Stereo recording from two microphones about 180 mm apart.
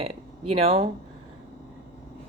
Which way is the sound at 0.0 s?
35° right (ahead or behind).